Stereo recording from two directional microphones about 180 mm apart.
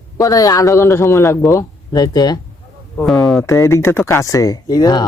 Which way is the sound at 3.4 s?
15° left (ahead or behind).